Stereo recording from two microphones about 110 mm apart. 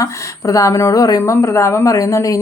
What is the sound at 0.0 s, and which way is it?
A woman's voice, 30° left (ahead or behind).